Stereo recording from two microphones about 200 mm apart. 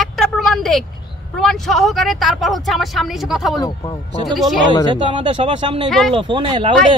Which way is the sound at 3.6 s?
20° left (ahead or behind).